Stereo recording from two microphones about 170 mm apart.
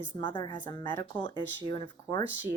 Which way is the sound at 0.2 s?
25° left (ahead or behind).